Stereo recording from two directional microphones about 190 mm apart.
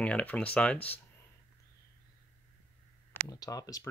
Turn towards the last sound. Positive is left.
turn(degrees=20)  # may be behind; listen again after turning